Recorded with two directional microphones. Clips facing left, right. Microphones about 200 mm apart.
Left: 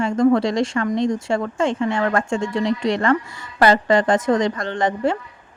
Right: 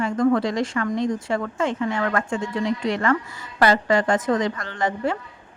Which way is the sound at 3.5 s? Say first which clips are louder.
Left 3 dB; 35° left (ahead or behind).